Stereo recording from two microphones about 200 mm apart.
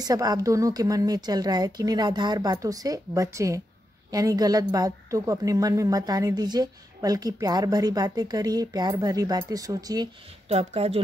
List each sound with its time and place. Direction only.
0.0 s a woman's voice: 20° right (ahead or behind)
10.5 s speech: 30° right (ahead or behind)